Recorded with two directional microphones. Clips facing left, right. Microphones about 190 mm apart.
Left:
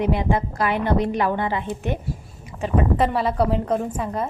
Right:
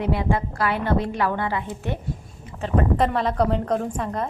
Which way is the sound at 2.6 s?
5° left (ahead or behind).